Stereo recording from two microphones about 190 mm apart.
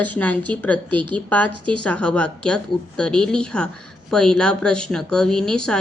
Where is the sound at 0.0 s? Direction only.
10° left (ahead or behind).